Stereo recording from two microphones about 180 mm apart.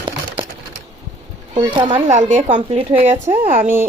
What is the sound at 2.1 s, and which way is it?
A woman's voice, 40° right (ahead or behind).